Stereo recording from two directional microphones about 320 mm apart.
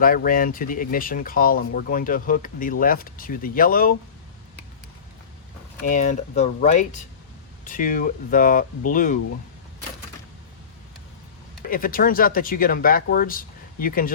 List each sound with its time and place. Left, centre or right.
0.0 s speech: left
5.8 s speech: left
11.7 s speech: left